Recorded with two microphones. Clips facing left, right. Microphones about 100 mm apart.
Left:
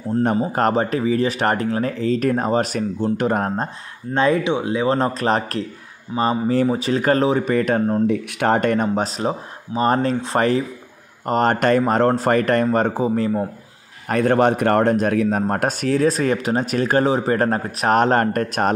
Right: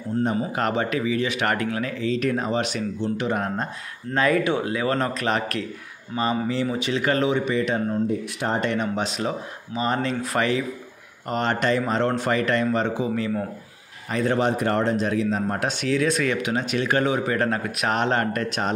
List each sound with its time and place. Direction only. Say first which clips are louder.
0.4 s speech: left 5 dB; 40° left (ahead or behind)
4.1 s speech: left 3 dB; 25° left (ahead or behind); by 8.0 s 50° left (ahead or behind)
8.1 s speech: left 6 dB; 65° left (ahead or behind); by 8.8 s 50° left (ahead or behind)
8.8 s speech: left 5 dB; 35° left (ahead or behind)
11.2 s speech: left 6 dB; 45° left (ahead or behind)
14.0 s speech: left 6 dB; 55° left (ahead or behind)